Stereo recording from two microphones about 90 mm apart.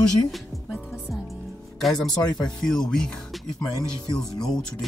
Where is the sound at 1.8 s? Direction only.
5° left (ahead or behind).